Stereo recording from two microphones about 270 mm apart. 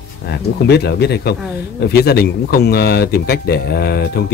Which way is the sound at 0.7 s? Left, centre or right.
Left.